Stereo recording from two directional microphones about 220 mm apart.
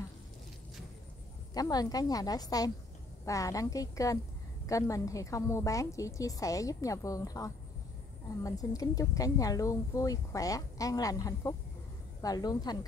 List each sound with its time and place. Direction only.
1.5 s speech: 15° left (ahead or behind)